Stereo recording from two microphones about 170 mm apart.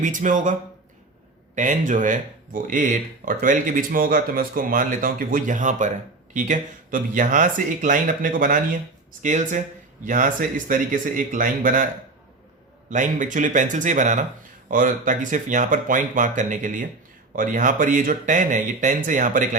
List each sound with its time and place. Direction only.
0.0 s speech: 50° right (ahead or behind)
1.5 s speech: 45° right (ahead or behind)
12.9 s speech: 50° right (ahead or behind)